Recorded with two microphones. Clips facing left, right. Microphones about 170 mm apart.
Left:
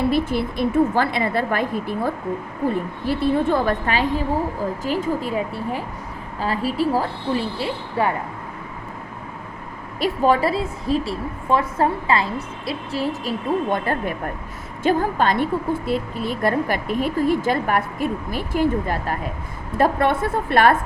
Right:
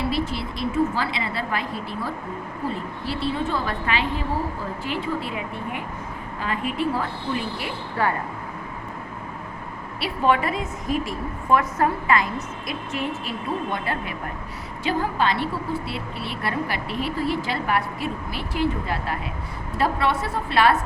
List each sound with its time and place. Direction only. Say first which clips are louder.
0.1 s a woman's voice: left 5 dB; 50° left (ahead or behind); by 8.1 s 25° left (ahead or behind)
10.0 s a woman's voice: left 4 dB; 35° left (ahead or behind)
13.7 s a woman's voice: left 6 dB; 50° left (ahead or behind)